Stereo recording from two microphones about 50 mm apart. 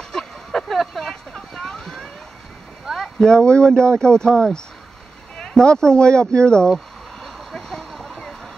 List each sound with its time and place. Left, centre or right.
0.1 s a sound: centre
1.6 s vehicle: centre
3.0 s speech: centre
7.2 s vehicle: centre